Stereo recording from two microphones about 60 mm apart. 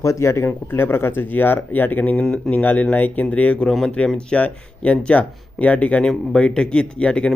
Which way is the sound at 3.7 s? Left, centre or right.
Centre.